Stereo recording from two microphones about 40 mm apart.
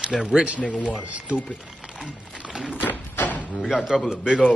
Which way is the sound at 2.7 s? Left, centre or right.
Left.